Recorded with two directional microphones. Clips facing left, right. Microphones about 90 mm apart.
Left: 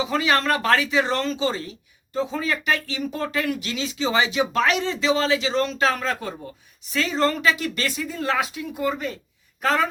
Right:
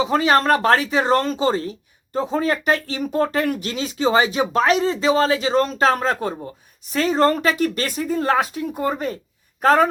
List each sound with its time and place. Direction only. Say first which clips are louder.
0.0 s speech: right 5 dB; 35° right (ahead or behind)